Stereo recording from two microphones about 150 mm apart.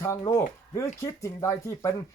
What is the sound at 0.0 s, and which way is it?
Speech, 20° left (ahead or behind).